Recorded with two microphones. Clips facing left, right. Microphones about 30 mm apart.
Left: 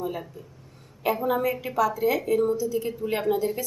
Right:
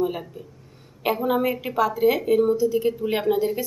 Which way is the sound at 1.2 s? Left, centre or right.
Right.